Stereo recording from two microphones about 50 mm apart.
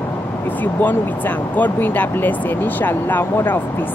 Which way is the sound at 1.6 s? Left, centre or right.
Left.